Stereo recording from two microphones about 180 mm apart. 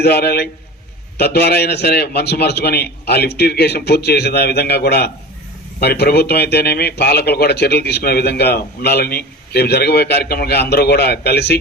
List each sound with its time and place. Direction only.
0.0 s speech: 60° left (ahead or behind)